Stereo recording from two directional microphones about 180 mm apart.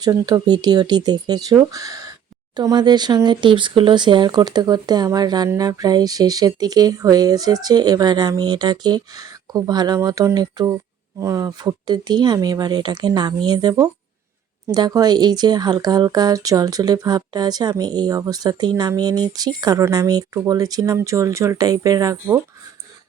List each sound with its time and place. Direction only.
0.0 s speech: 20° right (ahead or behind)